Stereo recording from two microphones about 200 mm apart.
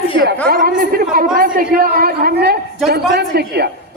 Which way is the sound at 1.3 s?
45° right (ahead or behind).